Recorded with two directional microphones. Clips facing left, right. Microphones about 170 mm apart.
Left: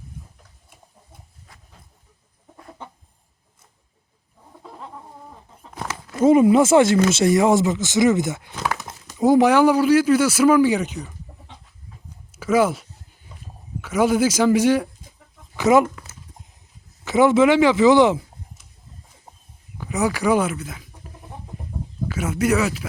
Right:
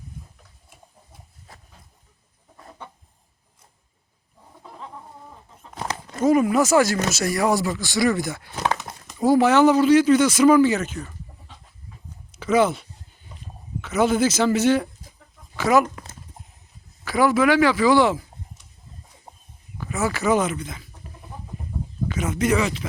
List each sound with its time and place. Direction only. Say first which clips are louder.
6.2 s speech: left 4 dB; 25° left (ahead or behind)
12.3 s speech: left 1 dB; 10° left (ahead or behind)
13.8 s speech: left 1 dB; 10° left (ahead or behind)
15.5 s speech: left 3 dB; 20° left (ahead or behind)
17.1 s speech: left 3 dB; 20° left (ahead or behind)
19.8 s speech: left 3 dB; 15° left (ahead or behind)
22.0 s speech: left 1 dB; 5° left (ahead or behind)